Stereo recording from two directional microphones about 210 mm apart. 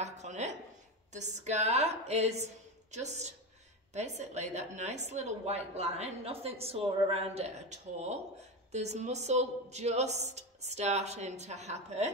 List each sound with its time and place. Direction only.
0.0 s a woman's voice: 35° right (ahead or behind)